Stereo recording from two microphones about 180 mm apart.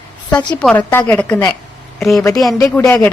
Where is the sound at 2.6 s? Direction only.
15° left (ahead or behind).